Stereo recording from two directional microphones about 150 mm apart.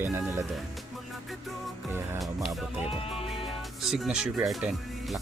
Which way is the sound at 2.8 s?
40° left (ahead or behind).